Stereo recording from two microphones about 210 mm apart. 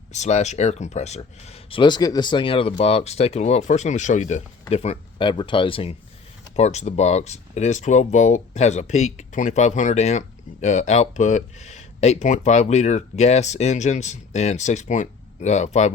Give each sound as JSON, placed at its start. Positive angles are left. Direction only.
{"t": 0.1, "sound": "speech", "side_deg": 35}